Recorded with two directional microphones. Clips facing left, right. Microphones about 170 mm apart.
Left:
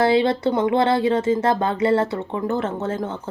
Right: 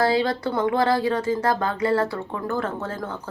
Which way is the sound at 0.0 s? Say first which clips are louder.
Left 4 dB; 25° left (ahead or behind).